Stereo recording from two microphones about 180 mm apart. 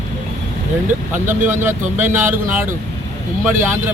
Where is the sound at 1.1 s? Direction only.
10° right (ahead or behind).